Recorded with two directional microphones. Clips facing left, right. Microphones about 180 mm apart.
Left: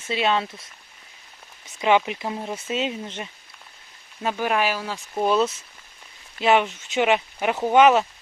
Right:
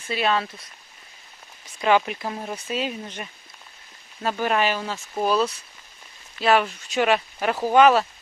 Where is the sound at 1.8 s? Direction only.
20° left (ahead or behind).